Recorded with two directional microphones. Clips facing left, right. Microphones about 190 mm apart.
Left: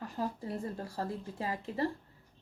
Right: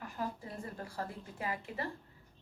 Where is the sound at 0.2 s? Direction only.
30° left (ahead or behind).